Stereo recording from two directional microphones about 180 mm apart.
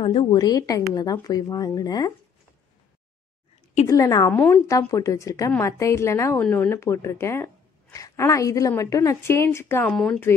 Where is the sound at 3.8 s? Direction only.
20° left (ahead or behind).